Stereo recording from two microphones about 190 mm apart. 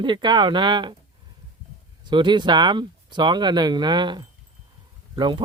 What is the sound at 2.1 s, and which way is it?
Speech, 25° right (ahead or behind).